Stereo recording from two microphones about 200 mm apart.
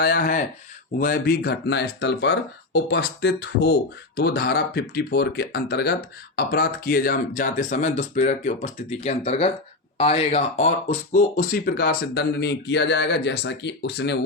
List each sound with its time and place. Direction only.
0.0 s speech: 50° left (ahead or behind)